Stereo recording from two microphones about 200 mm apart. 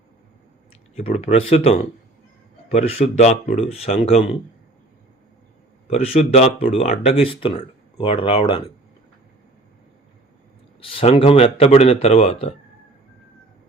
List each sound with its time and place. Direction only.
0.9 s speech: 30° left (ahead or behind)
5.9 s speech: 30° left (ahead or behind)
10.8 s speech: 25° left (ahead or behind)